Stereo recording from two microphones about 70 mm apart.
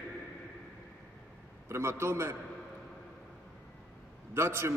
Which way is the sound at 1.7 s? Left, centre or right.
Right.